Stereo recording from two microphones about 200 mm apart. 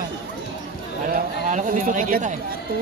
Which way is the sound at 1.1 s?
40° right (ahead or behind).